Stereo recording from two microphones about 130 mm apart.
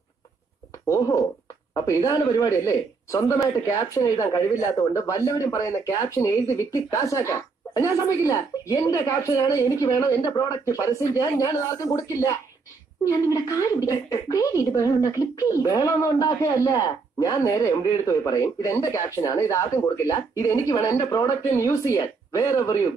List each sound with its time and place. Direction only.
0.8 s speech: 25° left (ahead or behind)